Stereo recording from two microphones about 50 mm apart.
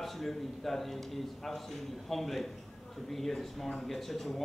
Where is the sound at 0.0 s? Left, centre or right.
Centre.